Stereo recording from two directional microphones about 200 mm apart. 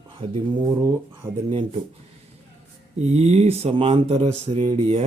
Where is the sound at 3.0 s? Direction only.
35° right (ahead or behind).